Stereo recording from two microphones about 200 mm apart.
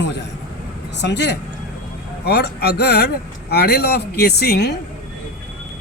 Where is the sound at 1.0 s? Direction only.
60° left (ahead or behind).